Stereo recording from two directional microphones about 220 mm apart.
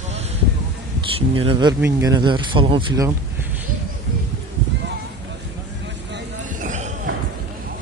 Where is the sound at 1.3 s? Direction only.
25° right (ahead or behind).